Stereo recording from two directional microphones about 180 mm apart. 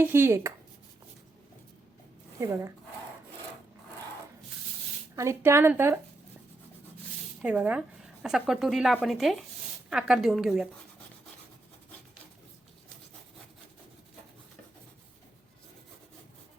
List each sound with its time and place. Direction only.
0.0 s speech: 15° right (ahead or behind)
2.4 s speech: 15° right (ahead or behind)
5.1 s speech: 15° right (ahead or behind)
7.4 s speech: 5° right (ahead or behind)